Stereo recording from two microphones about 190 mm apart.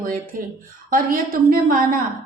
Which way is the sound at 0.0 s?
45° right (ahead or behind).